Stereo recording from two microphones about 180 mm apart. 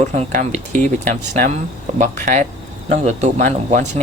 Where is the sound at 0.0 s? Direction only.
40° right (ahead or behind).